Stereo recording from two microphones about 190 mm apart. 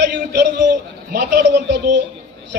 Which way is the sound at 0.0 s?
65° right (ahead or behind).